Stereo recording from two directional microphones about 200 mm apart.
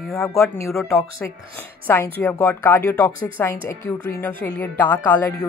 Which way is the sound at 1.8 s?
10° left (ahead or behind).